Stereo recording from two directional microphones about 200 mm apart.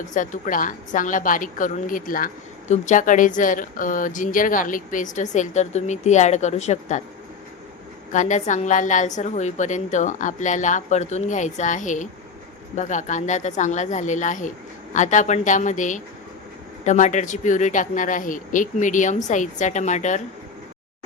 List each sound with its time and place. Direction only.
0.1 s a woman's voice: 40° left (ahead or behind)
8.1 s a woman's voice: 40° left (ahead or behind)